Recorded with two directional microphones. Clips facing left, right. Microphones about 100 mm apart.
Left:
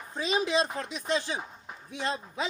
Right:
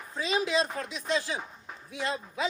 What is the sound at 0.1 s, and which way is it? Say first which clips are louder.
Speech: left 1 dB; 20° left (ahead or behind).